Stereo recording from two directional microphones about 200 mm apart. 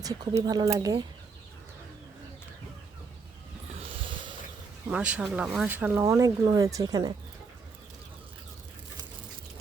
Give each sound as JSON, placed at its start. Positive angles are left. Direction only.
{"t": 0.0, "sound": "speech", "side_deg": -20}
{"t": 3.8, "sound": "a sound", "side_deg": -25}
{"t": 4.9, "sound": "speech", "side_deg": -5}